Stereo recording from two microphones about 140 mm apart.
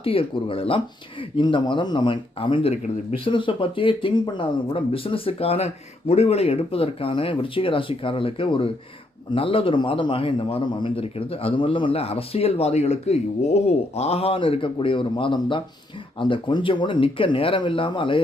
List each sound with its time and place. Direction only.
0.0 s a man's voice: 40° left (ahead or behind)